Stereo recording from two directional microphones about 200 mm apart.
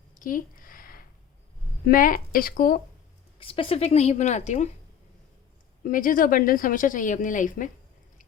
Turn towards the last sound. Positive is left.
turn(degrees=40)  # may be behind; listen again after turning